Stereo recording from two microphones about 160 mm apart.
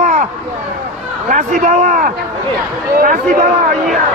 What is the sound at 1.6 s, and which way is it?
Speech, 55° right (ahead or behind).